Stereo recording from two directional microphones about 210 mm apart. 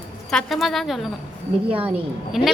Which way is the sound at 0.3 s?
Centre (ahead or behind).